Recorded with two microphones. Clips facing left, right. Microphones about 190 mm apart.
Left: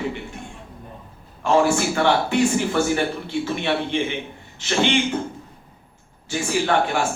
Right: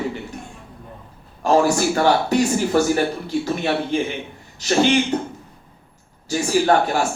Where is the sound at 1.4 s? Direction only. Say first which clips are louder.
Right 2 dB; 40° right (ahead or behind).